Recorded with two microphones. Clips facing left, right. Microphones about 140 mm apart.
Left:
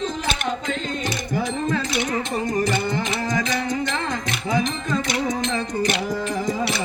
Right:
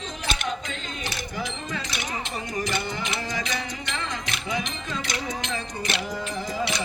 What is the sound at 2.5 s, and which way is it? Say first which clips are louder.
Music: left 6 dB; 45° left (ahead or behind).